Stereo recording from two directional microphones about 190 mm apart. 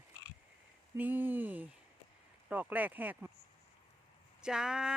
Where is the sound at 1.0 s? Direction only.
10° right (ahead or behind).